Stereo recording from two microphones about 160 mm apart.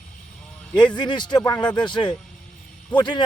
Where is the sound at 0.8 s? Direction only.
30° left (ahead or behind).